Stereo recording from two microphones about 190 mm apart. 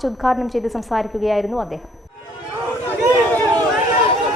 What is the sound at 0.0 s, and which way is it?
A woman's voice, centre (ahead or behind).